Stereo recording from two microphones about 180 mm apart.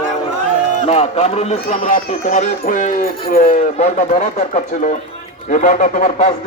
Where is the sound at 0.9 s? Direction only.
35° left (ahead or behind); by 3.7 s 50° left (ahead or behind).